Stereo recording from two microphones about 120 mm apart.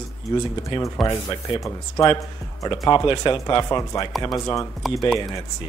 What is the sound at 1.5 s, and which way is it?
Speech, 30° left (ahead or behind).